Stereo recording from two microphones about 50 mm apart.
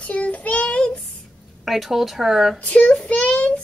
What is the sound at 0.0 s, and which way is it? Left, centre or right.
Child singing, left.